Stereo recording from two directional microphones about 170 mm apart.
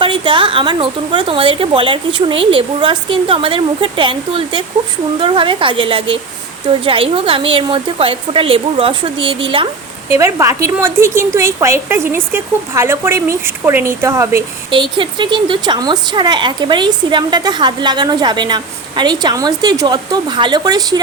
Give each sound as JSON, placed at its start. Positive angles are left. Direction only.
{"t": 0.0, "sound": "speech", "side_deg": -30}
{"t": 10.1, "sound": "speech", "side_deg": -15}
{"t": 14.7, "sound": "speech", "side_deg": -30}